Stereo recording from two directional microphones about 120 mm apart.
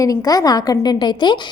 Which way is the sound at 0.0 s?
30° left (ahead or behind).